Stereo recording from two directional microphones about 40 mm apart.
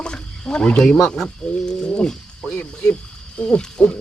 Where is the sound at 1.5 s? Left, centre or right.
Left.